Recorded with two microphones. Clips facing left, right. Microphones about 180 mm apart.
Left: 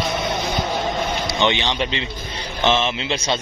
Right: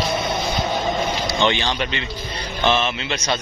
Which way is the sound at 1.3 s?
20° left (ahead or behind).